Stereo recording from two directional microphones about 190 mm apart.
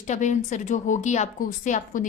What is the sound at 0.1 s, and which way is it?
A woman's voice, 40° left (ahead or behind).